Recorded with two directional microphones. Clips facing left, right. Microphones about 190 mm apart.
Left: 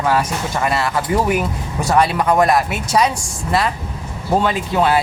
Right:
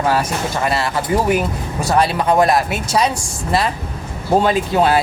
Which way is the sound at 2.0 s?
30° right (ahead or behind).